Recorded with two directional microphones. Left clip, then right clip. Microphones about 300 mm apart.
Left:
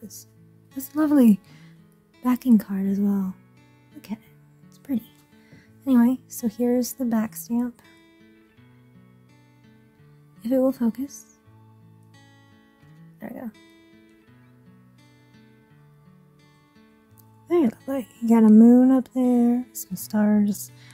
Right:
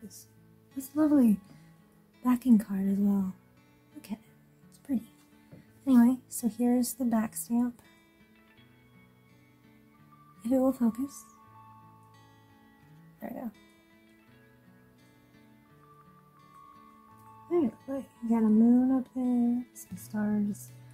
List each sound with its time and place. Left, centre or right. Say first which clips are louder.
0.9 s speech: left 6 dB; left
2.2 s speech: left 5 dB; left
4.9 s speech: left 5 dB; left
10.4 s speech: left 5 dB; left
13.2 s speech: left 3 dB; left
17.5 s speech: left 7 dB; left